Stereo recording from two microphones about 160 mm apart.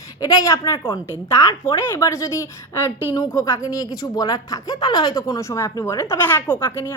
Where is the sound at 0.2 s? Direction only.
20° left (ahead or behind).